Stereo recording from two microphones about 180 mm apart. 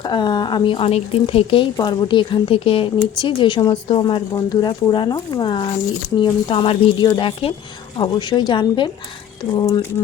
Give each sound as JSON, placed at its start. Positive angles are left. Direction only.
{"t": 0.0, "sound": "a woman's voice", "side_deg": 25}